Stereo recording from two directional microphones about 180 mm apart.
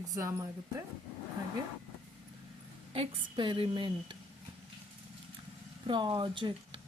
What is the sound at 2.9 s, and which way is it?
A woman's voice, 30° right (ahead or behind).